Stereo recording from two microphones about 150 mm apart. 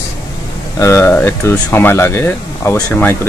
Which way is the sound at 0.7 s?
20° left (ahead or behind).